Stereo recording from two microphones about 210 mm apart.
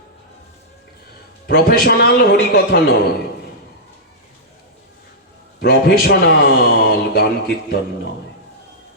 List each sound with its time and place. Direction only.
1.5 s a man's voice: 45° left (ahead or behind)
5.5 s a man's voice: 50° left (ahead or behind)